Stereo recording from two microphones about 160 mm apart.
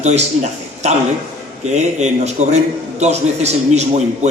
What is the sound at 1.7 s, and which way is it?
A man's voice, 45° right (ahead or behind).